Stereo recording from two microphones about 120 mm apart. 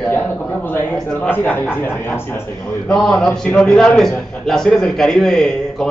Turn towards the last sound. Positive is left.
turn(degrees=5)  # may be behind; listen again after turning